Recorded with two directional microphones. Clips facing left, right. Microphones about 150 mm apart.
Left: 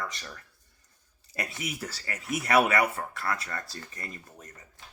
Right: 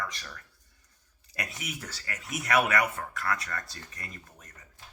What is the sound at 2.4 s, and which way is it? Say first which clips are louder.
Speech: left 2 dB; 30° left (ahead or behind).